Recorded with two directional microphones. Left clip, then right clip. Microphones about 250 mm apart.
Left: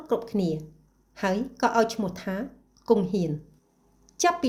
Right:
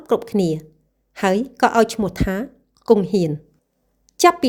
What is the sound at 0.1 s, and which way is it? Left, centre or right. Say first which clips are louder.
A woman's voice: right 8 dB; right.